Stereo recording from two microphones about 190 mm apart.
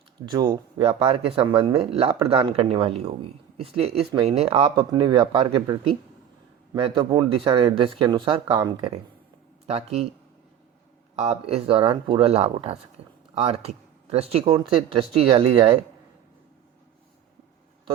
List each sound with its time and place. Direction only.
0.2 s speech: 25° right (ahead or behind)
11.2 s speech: 30° right (ahead or behind)